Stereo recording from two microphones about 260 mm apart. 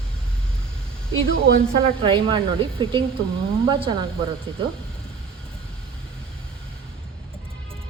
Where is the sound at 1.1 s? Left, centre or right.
Right.